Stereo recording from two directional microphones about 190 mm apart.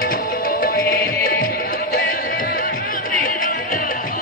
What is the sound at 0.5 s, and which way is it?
Music, 50° left (ahead or behind).